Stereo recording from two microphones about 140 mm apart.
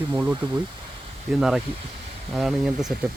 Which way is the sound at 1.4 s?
5° right (ahead or behind).